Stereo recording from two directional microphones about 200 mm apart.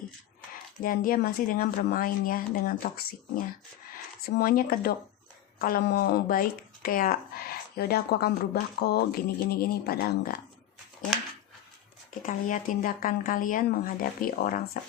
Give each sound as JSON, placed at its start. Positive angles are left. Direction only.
{"t": 0.8, "sound": "speech", "side_deg": 45}
{"t": 12.2, "sound": "speech", "side_deg": 40}